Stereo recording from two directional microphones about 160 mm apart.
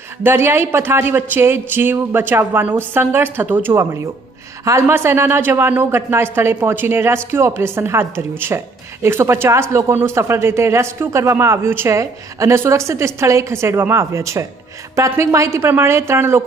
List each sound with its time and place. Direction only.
0.2 s speech: 15° right (ahead or behind)